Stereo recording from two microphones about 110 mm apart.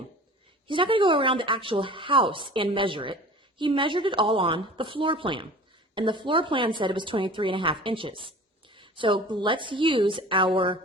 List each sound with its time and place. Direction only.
0.7 s a woman's voice: 50° right (ahead or behind)